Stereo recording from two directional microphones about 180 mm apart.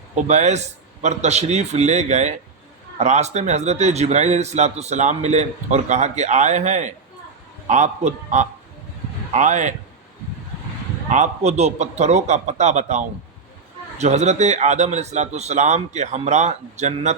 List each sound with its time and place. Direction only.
0.3 s a man's voice: 40° right (ahead or behind)
11.1 s a man's voice: 40° right (ahead or behind)